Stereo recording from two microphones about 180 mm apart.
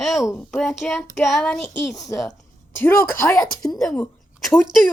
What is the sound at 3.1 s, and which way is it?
Speech, 15° left (ahead or behind).